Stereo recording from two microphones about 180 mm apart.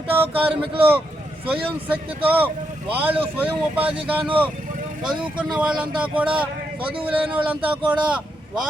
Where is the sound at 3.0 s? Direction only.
10° right (ahead or behind).